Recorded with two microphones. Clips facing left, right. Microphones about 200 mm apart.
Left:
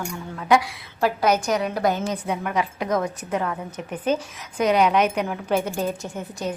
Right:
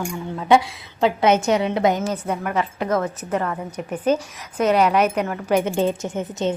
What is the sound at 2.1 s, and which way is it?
Speech, 5° right (ahead or behind).